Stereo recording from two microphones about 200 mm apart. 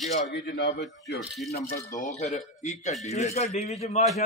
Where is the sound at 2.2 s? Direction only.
35° left (ahead or behind).